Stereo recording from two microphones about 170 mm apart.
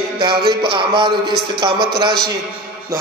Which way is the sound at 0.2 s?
30° right (ahead or behind).